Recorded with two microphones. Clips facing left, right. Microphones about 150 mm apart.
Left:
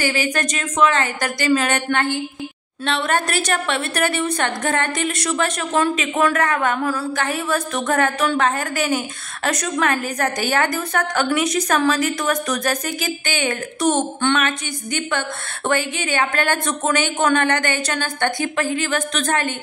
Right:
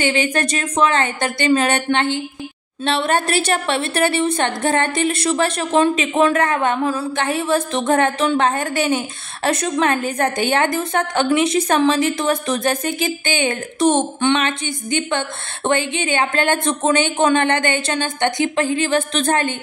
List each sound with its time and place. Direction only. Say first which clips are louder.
0.0 s a woman's voice: right 3 dB; 25° right (ahead or behind)